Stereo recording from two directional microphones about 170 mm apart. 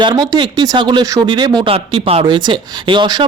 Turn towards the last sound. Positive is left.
turn(degrees=-25)  # may be behind; listen again after turning